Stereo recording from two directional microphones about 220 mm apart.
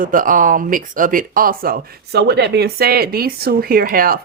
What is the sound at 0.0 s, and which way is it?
Speech, 40° right (ahead or behind).